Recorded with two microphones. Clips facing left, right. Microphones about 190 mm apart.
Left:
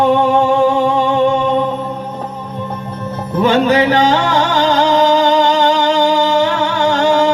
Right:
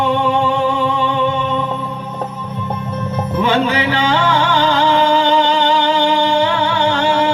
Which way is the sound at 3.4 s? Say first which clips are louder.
Left 5 dB; 40° left (ahead or behind).